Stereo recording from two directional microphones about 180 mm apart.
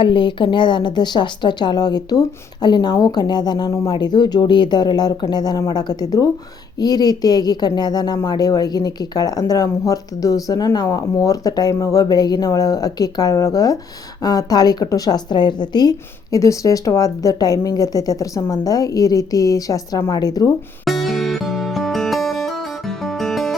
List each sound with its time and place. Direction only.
0.0 s speech: 25° left (ahead or behind)
20.8 s music: centre (ahead or behind)